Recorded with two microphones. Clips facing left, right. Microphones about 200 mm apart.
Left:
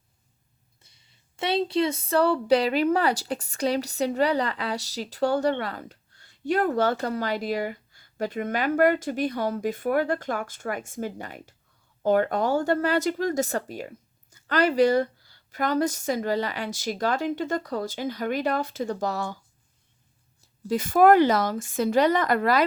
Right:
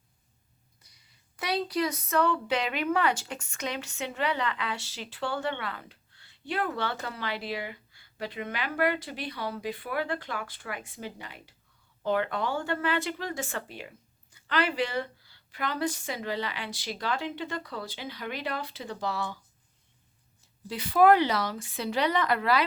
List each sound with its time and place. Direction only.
0.8 s speech: 25° left (ahead or behind); by 19.4 s 45° left (ahead or behind)
20.7 s speech: 45° left (ahead or behind)